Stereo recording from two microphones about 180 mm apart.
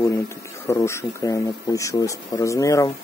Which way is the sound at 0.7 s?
15° left (ahead or behind).